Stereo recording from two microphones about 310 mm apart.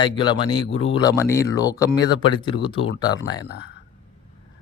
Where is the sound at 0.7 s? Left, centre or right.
Left.